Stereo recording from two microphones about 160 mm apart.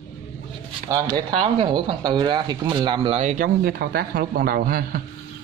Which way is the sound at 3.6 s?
80° right.